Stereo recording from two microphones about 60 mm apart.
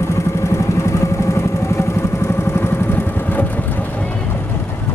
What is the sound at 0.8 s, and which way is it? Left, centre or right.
Vehicle, left.